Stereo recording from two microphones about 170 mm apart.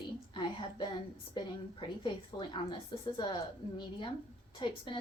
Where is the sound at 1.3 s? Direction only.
30° left (ahead or behind).